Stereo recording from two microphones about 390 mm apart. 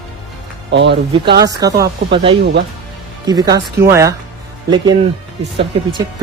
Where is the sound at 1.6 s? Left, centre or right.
Centre.